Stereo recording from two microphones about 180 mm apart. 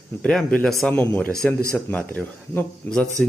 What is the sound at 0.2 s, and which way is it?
Speech, 5° left (ahead or behind).